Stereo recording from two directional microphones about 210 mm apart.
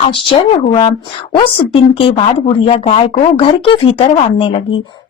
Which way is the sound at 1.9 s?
25° left (ahead or behind).